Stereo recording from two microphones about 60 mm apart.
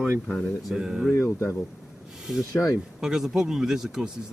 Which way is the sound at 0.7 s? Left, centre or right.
Centre.